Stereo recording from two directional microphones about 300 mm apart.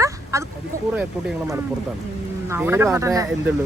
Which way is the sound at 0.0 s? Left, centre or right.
Centre.